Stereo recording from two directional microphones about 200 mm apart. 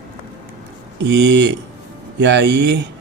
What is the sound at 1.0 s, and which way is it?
Speech, 60° right (ahead or behind).